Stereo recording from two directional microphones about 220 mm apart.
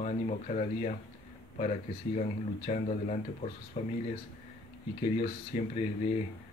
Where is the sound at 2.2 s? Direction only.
35° left (ahead or behind).